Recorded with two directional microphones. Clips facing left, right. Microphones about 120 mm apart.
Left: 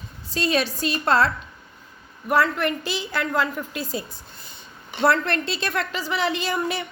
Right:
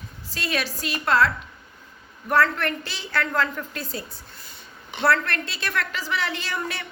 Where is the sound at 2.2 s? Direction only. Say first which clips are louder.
Left 1 dB; 15° left (ahead or behind).